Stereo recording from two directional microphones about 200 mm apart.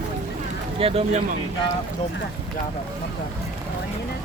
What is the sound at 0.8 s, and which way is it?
Speech, 30° right (ahead or behind).